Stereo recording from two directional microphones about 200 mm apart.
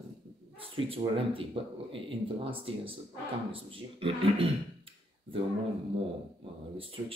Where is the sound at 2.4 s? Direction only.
25° right (ahead or behind).